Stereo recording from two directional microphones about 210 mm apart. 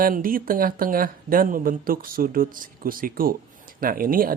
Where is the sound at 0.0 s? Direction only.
40° right (ahead or behind).